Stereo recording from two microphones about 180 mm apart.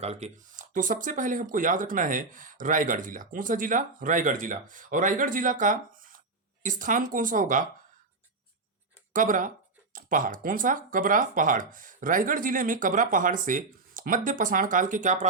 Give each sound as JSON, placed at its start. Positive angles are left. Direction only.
{"t": 0.0, "sound": "speech", "side_deg": -40}
{"t": 9.1, "sound": "speech", "side_deg": -45}